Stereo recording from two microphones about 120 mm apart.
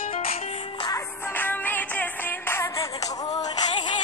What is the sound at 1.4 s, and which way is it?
Music, 15° left (ahead or behind).